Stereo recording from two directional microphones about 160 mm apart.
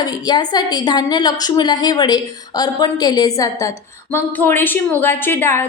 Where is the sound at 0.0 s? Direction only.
25° left (ahead or behind).